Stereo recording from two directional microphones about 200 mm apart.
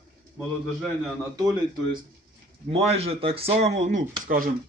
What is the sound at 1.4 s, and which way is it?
Speech, 15° right (ahead or behind).